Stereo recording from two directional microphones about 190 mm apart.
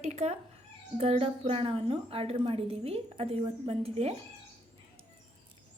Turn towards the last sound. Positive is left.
turn(degrees=-30)  # may be behind; listen again after turning